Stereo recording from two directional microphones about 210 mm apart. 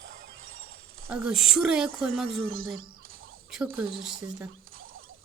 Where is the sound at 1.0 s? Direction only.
5° right (ahead or behind).